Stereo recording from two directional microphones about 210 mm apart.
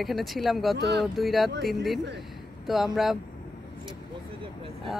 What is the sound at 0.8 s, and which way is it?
Speech, 55° right (ahead or behind).